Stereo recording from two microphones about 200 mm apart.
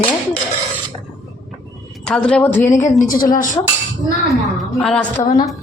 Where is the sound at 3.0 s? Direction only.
45° left (ahead or behind).